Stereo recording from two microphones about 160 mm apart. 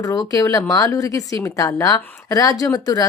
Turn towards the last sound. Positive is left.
turn(degrees=25)  # may be behind; listen again after turning